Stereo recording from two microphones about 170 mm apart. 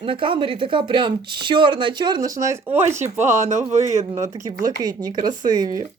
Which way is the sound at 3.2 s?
45° right (ahead or behind).